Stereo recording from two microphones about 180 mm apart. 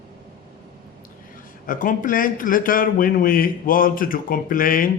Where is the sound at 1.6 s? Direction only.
50° left (ahead or behind).